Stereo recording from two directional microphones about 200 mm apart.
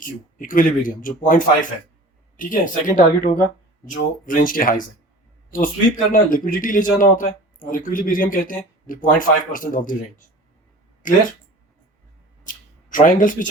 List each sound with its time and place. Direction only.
0.0 s speech: 40° left (ahead or behind)
12.5 s speech: 40° left (ahead or behind)